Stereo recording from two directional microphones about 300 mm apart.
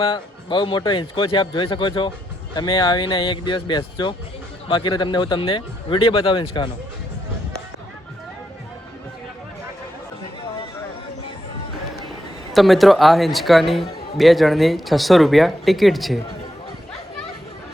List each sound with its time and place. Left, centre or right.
0.0 s a man's voice: centre
12.5 s speech: centre